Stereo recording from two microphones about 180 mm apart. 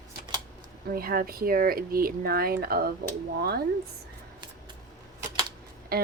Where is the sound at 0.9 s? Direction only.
55° right (ahead or behind).